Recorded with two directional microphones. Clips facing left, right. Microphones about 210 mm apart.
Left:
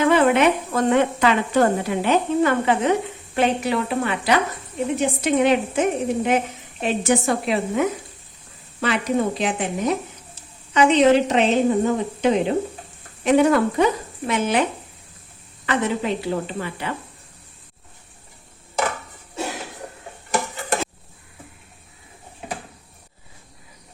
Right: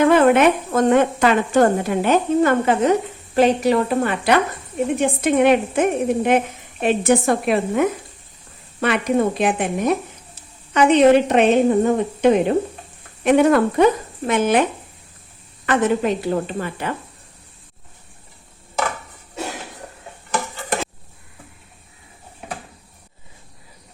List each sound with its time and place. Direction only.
0.0 s a woman's voice: 50° right (ahead or behind)
15.6 s a woman's voice: 50° right (ahead or behind)